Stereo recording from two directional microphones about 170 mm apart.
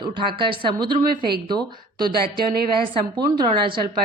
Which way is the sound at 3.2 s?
25° right (ahead or behind).